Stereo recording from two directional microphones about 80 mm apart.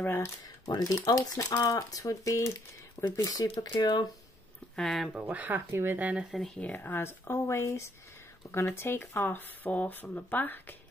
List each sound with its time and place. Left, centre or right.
0.0 s speech: left
0.7 s speech: left
3.7 s speech: left
4.7 s speech: centre
5.1 s speech: centre
5.9 s speech: centre
6.3 s speech: centre
6.6 s speech: left